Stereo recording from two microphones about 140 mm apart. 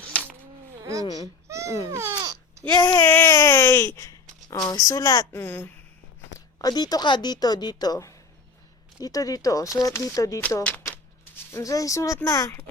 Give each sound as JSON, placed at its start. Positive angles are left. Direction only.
{"t": 0.1, "sound": "a sound", "side_deg": 10}
{"t": 0.8, "sound": "a sound", "side_deg": -25}
{"t": 1.0, "sound": "a woman's voice", "side_deg": 30}
{"t": 1.5, "sound": "baby cry", "side_deg": -20}
{"t": 1.9, "sound": "babbling", "side_deg": -20}
{"t": 2.8, "sound": "a woman's voice", "side_deg": 25}
{"t": 3.1, "sound": "a sound", "side_deg": 15}
{"t": 4.5, "sound": "a woman's voice", "side_deg": 30}
{"t": 6.6, "sound": "a woman's voice", "side_deg": 30}
{"t": 11.5, "sound": "a woman's voice", "side_deg": 25}